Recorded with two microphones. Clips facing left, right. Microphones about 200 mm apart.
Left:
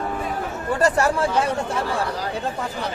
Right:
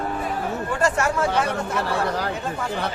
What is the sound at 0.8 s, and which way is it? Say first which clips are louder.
Speech: left 3 dB; 35° left (ahead or behind).